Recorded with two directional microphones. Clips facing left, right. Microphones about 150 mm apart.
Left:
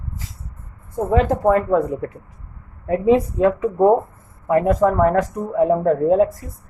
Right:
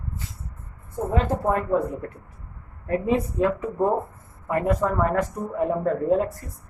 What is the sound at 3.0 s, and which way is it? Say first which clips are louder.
Speech: left 8 dB; 90° left.